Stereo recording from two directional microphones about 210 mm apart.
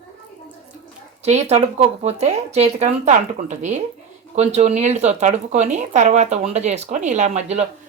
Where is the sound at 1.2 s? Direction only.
30° right (ahead or behind).